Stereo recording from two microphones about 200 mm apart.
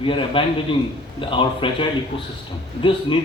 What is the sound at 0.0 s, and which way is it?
A man's voice, 25° left (ahead or behind).